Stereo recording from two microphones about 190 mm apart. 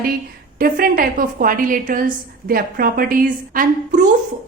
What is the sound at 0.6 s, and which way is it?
A woman's voice, 50° right (ahead or behind).